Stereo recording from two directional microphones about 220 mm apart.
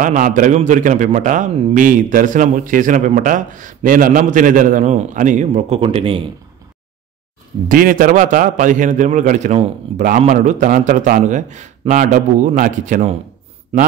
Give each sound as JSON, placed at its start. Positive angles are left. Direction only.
{"t": 0.0, "sound": "speech", "side_deg": -35}
{"t": 7.6, "sound": "a man's voice", "side_deg": -40}